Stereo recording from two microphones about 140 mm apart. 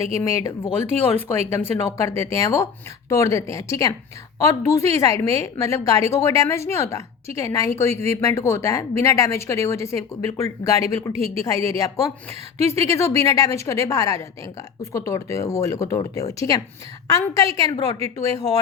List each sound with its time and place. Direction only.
0.2 s a woman's voice: 20° left (ahead or behind)